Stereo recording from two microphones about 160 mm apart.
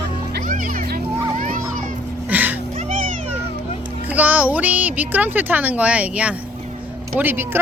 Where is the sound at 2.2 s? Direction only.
10° right (ahead or behind).